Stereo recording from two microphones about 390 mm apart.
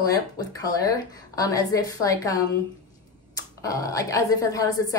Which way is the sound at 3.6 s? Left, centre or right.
Centre.